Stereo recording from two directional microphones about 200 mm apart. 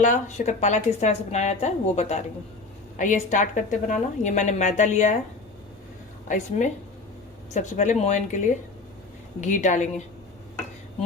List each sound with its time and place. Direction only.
0.0 s a woman's voice: 35° left (ahead or behind)
6.2 s a woman's voice: 40° left (ahead or behind)